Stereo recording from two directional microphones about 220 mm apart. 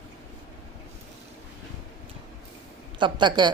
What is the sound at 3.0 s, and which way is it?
Speech, 20° right (ahead or behind).